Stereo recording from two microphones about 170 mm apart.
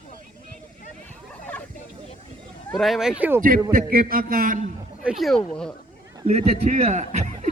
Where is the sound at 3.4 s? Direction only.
55° right (ahead or behind).